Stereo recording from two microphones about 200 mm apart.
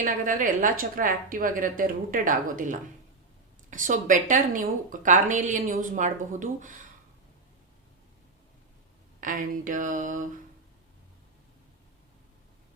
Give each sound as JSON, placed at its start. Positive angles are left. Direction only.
{"t": 0.0, "sound": "a woman's voice", "side_deg": -40}
{"t": 9.2, "sound": "a woman's voice", "side_deg": -40}